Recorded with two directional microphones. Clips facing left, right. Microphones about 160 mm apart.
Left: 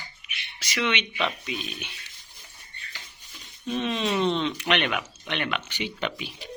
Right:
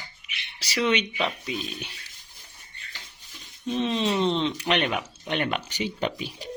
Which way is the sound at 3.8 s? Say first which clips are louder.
Right 1 dB; 30° right (ahead or behind).